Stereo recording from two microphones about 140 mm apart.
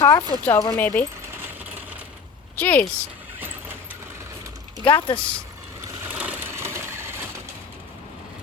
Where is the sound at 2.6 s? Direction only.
10° left (ahead or behind).